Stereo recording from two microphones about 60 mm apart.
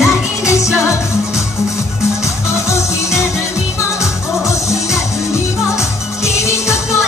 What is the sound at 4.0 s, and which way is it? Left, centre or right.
Music, left.